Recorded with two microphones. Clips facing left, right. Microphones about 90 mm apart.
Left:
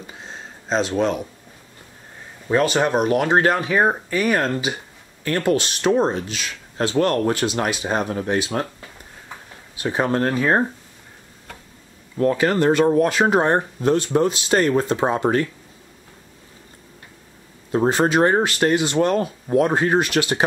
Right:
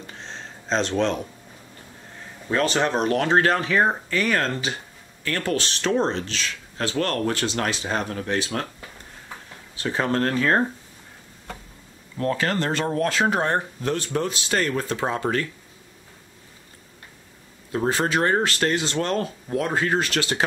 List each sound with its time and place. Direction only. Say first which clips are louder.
0.0 s a sound: left 1 dB; 5° left (ahead or behind)
2.5 s speech: left 4 dB; 15° left (ahead or behind)
9.8 s speech: left 3 dB; 15° left (ahead or behind)
12.4 s speech: left 7 dB; 15° left (ahead or behind)
17.6 s speech: left 5 dB; 25° left (ahead or behind)